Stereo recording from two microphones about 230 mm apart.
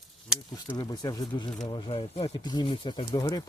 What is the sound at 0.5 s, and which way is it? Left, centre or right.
Speech, centre.